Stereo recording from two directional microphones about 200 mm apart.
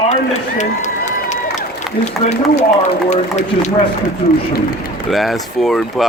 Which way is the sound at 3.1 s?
35° left (ahead or behind).